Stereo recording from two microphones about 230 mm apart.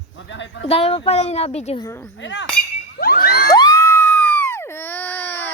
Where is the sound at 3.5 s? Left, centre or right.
Centre.